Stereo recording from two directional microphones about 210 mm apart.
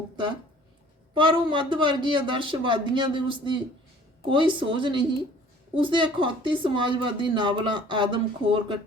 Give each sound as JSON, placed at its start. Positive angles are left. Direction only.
{"t": 1.1, "sound": "a woman's voice", "side_deg": -25}